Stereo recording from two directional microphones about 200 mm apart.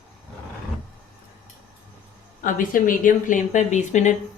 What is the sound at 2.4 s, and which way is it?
Speech, 45° left (ahead or behind).